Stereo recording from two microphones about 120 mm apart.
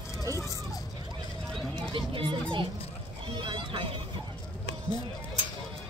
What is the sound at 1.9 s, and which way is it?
Speech, 45° right (ahead or behind).